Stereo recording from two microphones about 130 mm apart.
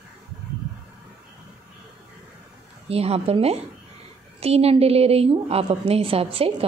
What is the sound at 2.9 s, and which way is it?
A woman's voice, 50° right (ahead or behind).